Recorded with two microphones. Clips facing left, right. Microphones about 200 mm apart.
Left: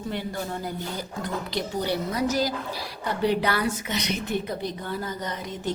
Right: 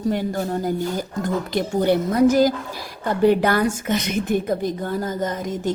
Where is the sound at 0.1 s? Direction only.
45° right (ahead or behind).